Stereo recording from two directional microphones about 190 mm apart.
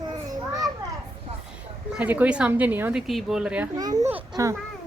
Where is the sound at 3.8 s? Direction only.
20° right (ahead or behind).